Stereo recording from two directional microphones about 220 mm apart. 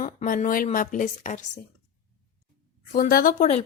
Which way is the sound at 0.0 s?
35° left (ahead or behind).